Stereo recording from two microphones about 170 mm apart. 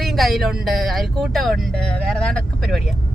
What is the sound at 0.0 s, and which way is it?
Speech, centre (ahead or behind).